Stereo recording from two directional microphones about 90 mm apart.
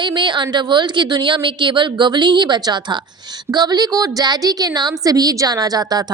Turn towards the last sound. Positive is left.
turn(degrees=-45)  # may be behind; listen again after turning